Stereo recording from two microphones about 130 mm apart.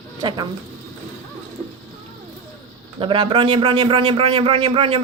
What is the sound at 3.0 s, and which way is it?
A man's voice, 40° right (ahead or behind).